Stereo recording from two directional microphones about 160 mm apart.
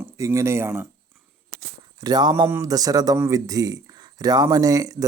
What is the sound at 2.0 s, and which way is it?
Speech, 25° right (ahead or behind).